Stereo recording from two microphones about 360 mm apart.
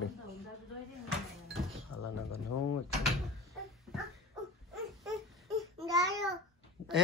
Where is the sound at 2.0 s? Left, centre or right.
Left.